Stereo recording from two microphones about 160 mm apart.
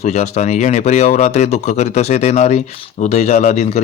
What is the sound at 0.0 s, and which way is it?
A man's voice, 50° left (ahead or behind).